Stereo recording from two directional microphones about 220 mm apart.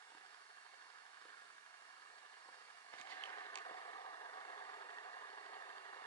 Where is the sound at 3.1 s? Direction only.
15° left (ahead or behind).